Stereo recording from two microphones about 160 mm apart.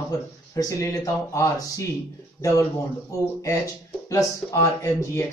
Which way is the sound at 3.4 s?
20° left (ahead or behind).